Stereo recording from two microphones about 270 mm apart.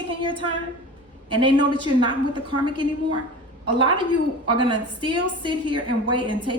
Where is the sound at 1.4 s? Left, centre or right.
Centre.